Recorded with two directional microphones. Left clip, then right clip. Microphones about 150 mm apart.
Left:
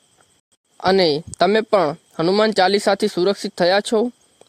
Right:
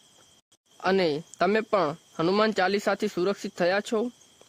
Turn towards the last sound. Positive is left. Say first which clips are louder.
# left 9 dB
turn(degrees=35)  # may be behind; listen again after turning